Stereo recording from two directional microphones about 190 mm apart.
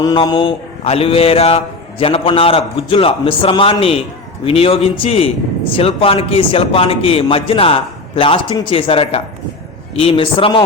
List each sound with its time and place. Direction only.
0.0 s a man's voice: 25° left (ahead or behind)